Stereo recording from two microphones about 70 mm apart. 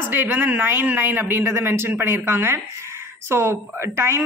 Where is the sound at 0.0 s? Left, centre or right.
Right.